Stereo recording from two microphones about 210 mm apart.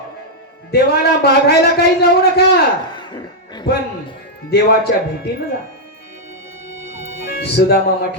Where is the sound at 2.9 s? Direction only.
20° left (ahead or behind).